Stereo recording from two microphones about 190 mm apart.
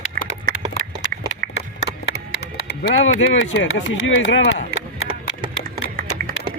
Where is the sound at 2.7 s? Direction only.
90° left.